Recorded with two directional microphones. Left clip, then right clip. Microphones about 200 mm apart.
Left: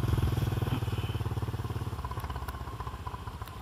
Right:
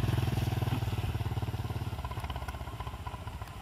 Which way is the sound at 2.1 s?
25° right (ahead or behind).